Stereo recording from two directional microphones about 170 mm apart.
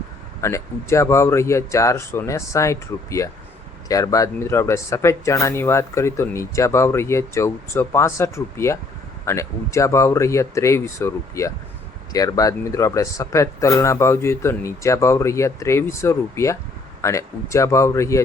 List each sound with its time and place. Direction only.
0.4 s speech: 15° left (ahead or behind)